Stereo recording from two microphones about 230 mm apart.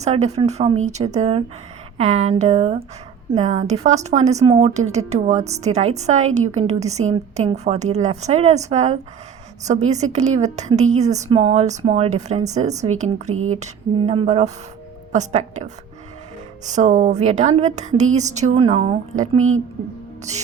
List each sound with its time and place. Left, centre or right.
0.0 s a woman's voice: right
13.3 s speech: right
14.1 s a woman's voice: right
19.4 s speech: right
20.3 s a woman's voice: right